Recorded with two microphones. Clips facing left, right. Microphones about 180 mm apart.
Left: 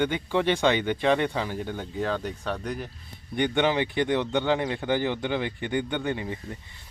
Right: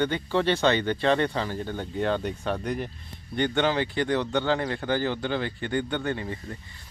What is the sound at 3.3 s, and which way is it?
Speech, 15° left (ahead or behind).